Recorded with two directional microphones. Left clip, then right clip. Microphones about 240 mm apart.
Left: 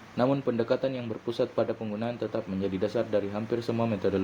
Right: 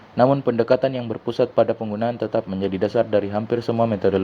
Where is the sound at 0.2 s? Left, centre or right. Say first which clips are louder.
Right 9 dB; right.